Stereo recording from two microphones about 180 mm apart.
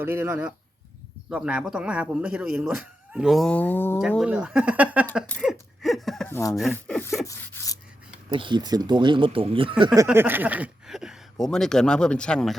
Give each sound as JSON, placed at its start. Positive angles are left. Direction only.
{"t": 0.0, "sound": "speech", "side_deg": -10}
{"t": 4.2, "sound": "speech", "side_deg": -5}
{"t": 5.4, "sound": "a sound", "side_deg": 0}
{"t": 6.2, "sound": "speech", "side_deg": 10}
{"t": 7.3, "sound": "a sound", "side_deg": 15}
{"t": 8.3, "sound": "speech", "side_deg": -25}
{"t": 10.1, "sound": "speech", "side_deg": -10}